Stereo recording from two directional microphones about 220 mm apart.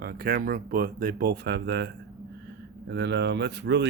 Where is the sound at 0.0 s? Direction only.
45° right (ahead or behind).